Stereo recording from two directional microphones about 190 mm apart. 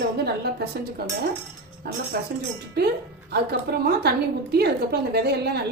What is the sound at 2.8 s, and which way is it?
A woman's voice, 60° right (ahead or behind).